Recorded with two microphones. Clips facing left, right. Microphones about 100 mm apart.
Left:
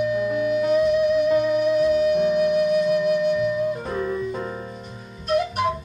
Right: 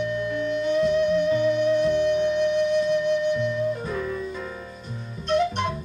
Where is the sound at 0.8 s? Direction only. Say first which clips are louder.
Left 2 dB; 5° left (ahead or behind).